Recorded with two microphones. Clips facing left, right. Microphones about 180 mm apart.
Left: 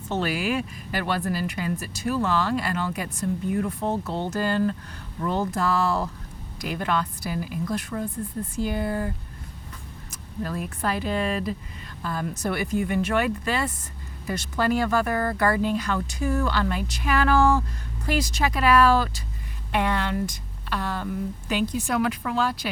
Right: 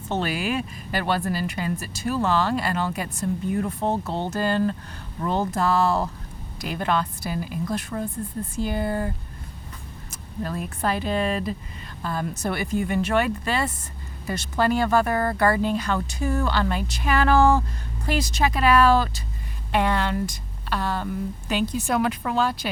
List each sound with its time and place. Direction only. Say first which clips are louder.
0.1 s speech: even; 25° right (ahead or behind)